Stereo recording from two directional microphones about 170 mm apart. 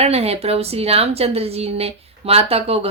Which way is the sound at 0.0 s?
35° right (ahead or behind).